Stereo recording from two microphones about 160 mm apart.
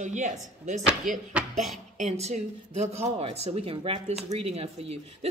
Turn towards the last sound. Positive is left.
turn(degrees=-40)  # may be behind; listen again after turning